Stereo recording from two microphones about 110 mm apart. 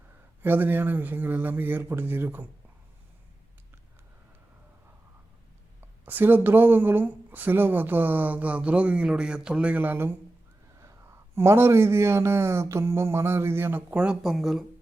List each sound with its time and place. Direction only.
0.4 s speech: 15° right (ahead or behind)
6.1 s speech: 15° right (ahead or behind); by 14.6 s centre (ahead or behind)